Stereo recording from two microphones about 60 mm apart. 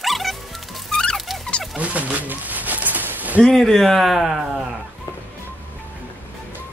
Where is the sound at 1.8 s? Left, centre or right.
Right.